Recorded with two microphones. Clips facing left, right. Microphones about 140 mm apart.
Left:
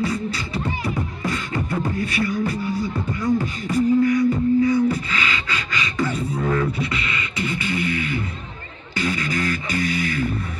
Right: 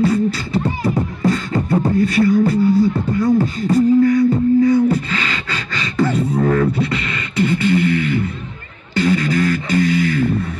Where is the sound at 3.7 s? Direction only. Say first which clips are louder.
Right 5 dB; 50° right (ahead or behind).